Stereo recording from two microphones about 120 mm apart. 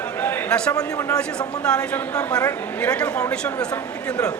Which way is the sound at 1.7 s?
10° left (ahead or behind).